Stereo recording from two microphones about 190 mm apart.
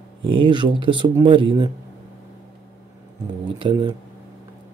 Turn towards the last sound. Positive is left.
turn(degrees=-25)  # may be behind; listen again after turning